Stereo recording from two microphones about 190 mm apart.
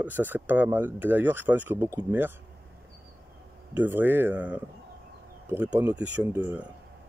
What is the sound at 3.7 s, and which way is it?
Speech, 10° right (ahead or behind).